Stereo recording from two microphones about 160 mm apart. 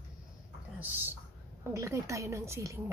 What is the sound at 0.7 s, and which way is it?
A woman's voice, 10° right (ahead or behind).